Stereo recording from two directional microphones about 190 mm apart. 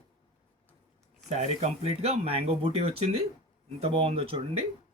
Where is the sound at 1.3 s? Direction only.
35° right (ahead or behind).